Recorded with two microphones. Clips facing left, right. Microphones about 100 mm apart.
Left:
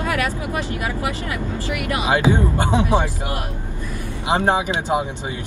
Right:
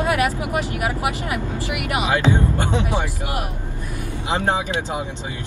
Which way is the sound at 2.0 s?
20° left (ahead or behind).